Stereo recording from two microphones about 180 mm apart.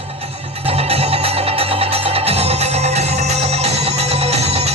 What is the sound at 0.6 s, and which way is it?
Music, 35° right (ahead or behind).